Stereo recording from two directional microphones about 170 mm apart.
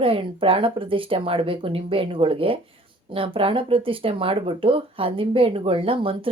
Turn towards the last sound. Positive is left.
turn(degrees=-30)  # may be behind; listen again after turning